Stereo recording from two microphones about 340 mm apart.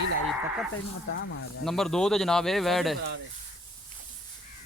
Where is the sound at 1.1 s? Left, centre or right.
Left.